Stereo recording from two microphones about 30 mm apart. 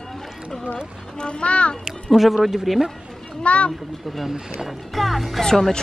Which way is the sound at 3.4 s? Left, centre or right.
Left.